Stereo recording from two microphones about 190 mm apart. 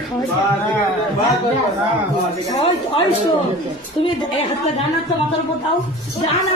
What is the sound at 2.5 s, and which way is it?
Speech, 25° left (ahead or behind).